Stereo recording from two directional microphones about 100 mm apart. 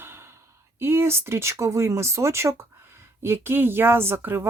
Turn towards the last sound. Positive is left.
turn(degrees=-25)  # may be behind; listen again after turning